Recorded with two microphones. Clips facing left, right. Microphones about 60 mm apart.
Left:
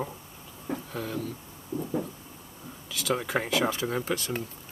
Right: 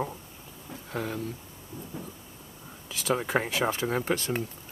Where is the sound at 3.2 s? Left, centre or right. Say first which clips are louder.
Even; right.